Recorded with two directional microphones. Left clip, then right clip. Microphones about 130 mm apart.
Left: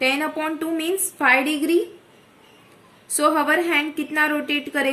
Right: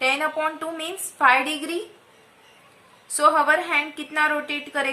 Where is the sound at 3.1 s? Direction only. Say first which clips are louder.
Right 1 dB; 10° left (ahead or behind).